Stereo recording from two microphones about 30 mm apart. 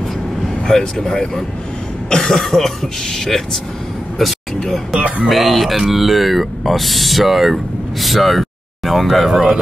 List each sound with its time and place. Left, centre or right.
0.7 s speech: centre
4.2 s speech: centre
5.0 s music: right
5.3 s speech: centre